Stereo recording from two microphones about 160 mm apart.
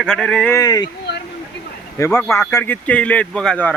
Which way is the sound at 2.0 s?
15° left (ahead or behind).